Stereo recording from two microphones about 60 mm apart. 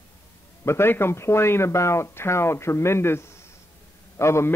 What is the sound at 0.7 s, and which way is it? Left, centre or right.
A man's voice, left.